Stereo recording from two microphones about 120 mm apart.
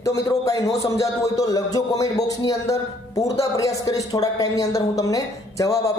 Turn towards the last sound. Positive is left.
turn(degrees=30)  # may be behind; listen again after turning